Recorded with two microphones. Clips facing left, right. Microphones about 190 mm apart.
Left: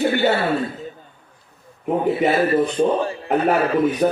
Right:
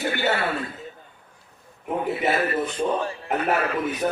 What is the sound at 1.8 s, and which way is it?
A man's voice, 35° left (ahead or behind).